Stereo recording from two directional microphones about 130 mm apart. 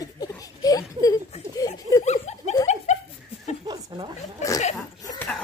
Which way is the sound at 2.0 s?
60° left (ahead or behind).